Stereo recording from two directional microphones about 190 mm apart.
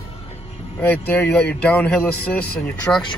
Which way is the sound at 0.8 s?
10° left (ahead or behind).